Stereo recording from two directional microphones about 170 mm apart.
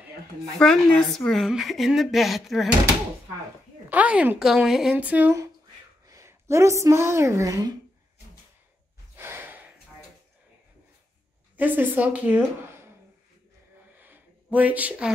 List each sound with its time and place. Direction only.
0.6 s a woman's voice: 5° left (ahead or behind)
3.9 s a woman's voice: 10° right (ahead or behind)
9.1 s gasp: 15° right (ahead or behind)
11.5 s a woman's voice: 10° right (ahead or behind)
13.9 s a sound: 10° right (ahead or behind)